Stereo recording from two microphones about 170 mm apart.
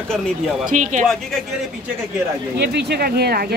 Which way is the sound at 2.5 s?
75° right (ahead or behind).